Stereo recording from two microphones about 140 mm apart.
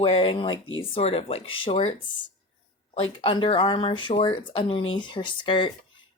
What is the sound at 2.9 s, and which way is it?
Speech, 40° left (ahead or behind).